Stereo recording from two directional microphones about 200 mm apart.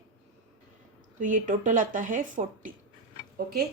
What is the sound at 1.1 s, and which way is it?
Speech, 40° right (ahead or behind).